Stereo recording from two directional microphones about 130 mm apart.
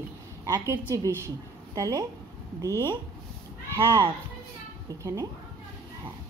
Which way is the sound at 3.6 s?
30° right (ahead or behind).